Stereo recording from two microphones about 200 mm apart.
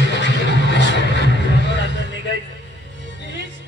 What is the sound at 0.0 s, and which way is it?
Music, 60° left (ahead or behind).